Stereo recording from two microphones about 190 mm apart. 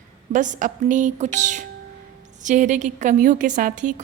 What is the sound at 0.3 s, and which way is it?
A woman's voice, 40° right (ahead or behind).